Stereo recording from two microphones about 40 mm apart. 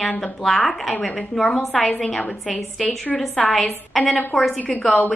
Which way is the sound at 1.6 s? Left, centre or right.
Centre.